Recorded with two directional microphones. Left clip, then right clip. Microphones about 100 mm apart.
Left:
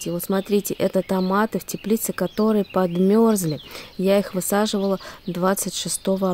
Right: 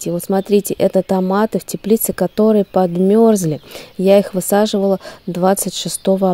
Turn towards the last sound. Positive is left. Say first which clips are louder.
# right 7 dB
turn(degrees=-35)  # may be behind; listen again after turning